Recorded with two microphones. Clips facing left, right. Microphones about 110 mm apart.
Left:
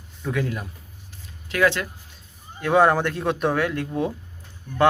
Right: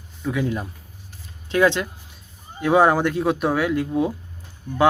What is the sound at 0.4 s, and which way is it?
Speech, 25° right (ahead or behind).